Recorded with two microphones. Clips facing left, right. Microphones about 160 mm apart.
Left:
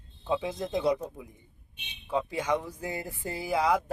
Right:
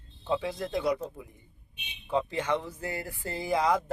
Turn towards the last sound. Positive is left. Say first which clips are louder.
# even
turn(degrees=10)  # may be behind; listen again after turning